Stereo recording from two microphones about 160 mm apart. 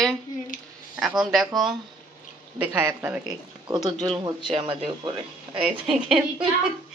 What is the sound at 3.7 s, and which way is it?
Speech, 25° right (ahead or behind).